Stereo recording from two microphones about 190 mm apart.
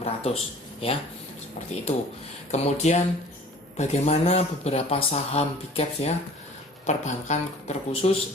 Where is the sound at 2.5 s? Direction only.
35° left (ahead or behind).